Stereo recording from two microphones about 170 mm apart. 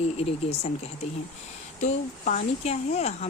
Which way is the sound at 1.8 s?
45° left (ahead or behind).